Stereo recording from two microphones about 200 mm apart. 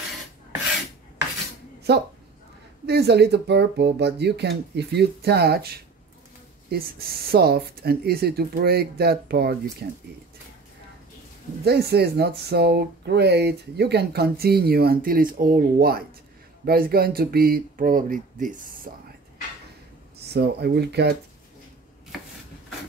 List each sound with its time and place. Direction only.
1.9 s speech: 55° right (ahead or behind)
11.6 s speech: 55° right (ahead or behind)
20.3 s speech: 55° right (ahead or behind)